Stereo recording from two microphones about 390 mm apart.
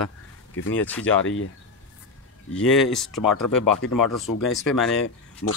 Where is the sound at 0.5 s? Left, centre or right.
Left.